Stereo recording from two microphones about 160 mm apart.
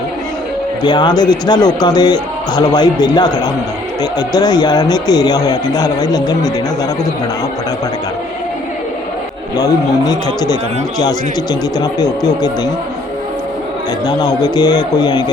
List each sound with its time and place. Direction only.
0.8 s speech: 25° left (ahead or behind)
9.6 s speech: 25° left (ahead or behind)
11.8 s speech: 25° left (ahead or behind)
14.1 s speech: 25° left (ahead or behind)